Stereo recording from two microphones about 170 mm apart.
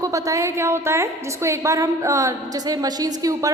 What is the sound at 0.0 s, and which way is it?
A woman's voice, 20° right (ahead or behind).